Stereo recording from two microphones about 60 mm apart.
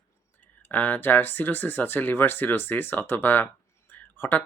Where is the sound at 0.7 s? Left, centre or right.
Left.